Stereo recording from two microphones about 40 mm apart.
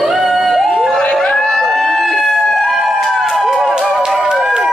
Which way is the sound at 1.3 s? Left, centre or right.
Centre.